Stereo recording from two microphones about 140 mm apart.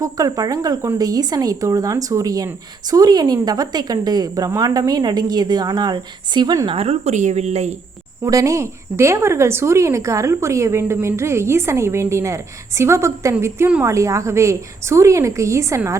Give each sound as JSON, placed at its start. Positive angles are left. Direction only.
{"t": 0.0, "sound": "speech", "side_deg": -25}
{"t": 6.7, "sound": "speech", "side_deg": -50}
{"t": 8.2, "sound": "speech", "side_deg": -20}